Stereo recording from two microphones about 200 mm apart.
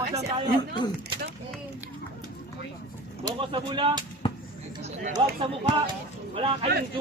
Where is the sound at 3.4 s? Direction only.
25° right (ahead or behind).